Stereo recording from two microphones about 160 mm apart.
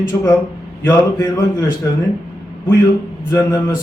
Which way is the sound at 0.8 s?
15° left (ahead or behind).